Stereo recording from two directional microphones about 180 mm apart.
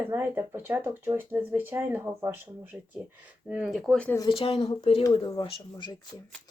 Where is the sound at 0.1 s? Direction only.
10° right (ahead or behind).